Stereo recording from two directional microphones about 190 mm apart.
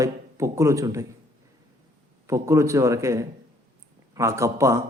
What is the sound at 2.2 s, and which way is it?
A man's voice, 15° right (ahead or behind).